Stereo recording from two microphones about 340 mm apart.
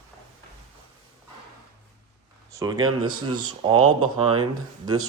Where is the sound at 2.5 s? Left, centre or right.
Centre.